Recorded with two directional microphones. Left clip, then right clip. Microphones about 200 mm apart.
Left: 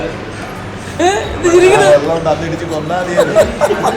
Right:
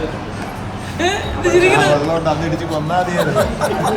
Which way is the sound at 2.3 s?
20° right (ahead or behind).